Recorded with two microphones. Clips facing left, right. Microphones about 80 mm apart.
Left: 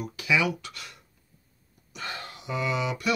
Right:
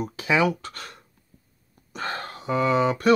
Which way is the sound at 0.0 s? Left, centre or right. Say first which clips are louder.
Right 4 dB; right.